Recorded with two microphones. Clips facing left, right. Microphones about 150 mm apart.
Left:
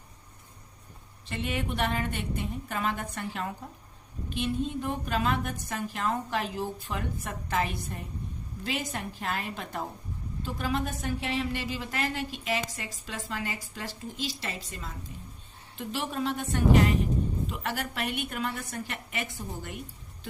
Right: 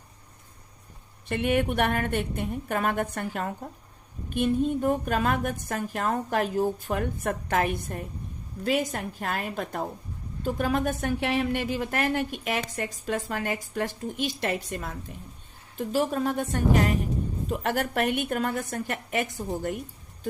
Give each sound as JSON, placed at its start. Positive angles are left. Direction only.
{"t": 1.3, "sound": "a woman's voice", "side_deg": -55}
{"t": 15.8, "sound": "speech", "side_deg": -40}